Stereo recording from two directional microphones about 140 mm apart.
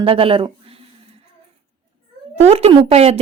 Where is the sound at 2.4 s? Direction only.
50° right (ahead or behind).